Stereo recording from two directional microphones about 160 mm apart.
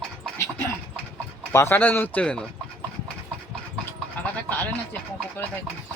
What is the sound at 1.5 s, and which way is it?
Speech, 15° left (ahead or behind).